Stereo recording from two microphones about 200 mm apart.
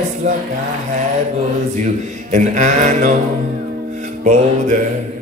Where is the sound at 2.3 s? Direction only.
35° right (ahead or behind).